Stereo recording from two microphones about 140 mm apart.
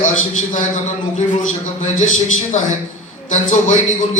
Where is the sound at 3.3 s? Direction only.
60° left (ahead or behind).